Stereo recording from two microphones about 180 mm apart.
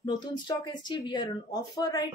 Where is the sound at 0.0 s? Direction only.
25° left (ahead or behind).